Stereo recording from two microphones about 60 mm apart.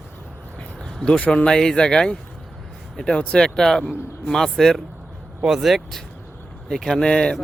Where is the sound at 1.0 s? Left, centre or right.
Centre.